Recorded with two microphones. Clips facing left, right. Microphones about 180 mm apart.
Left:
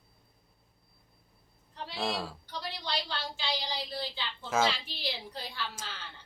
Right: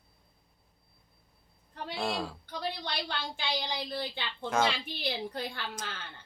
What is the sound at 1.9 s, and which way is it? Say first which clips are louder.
Speech: right 1 dB; centre (ahead or behind).